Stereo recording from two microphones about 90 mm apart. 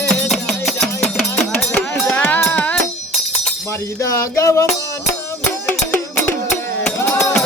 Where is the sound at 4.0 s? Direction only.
35° left (ahead or behind).